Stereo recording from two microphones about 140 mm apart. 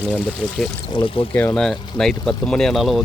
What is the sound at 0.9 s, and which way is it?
Speech, 40° left (ahead or behind).